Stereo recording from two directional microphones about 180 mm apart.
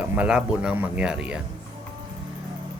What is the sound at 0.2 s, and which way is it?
Speech, 5° right (ahead or behind).